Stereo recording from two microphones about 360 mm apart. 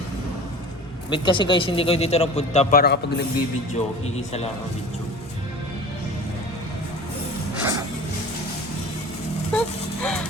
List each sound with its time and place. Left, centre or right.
1.1 s a man's voice: centre
4.0 s a man's voice: centre
7.6 s music: centre
9.5 s a sound: centre